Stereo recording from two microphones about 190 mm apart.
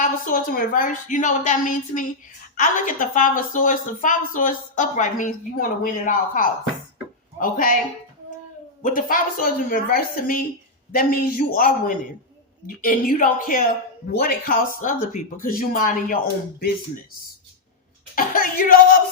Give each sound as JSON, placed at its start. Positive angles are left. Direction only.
{"t": 0.0, "sound": "a woman's voice", "side_deg": 45}
{"t": 8.8, "sound": "a woman's voice", "side_deg": 45}
{"t": 18.1, "sound": "a woman's voice", "side_deg": 50}